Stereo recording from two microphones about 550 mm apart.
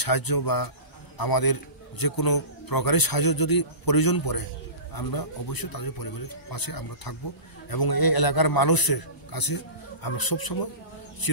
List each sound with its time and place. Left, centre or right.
0.0 s a man's voice: left